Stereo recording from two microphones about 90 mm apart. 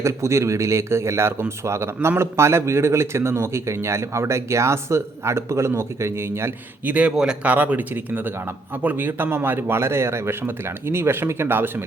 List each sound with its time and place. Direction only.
0.0 s speech: 35° right (ahead or behind)
6.8 s speech: 15° right (ahead or behind)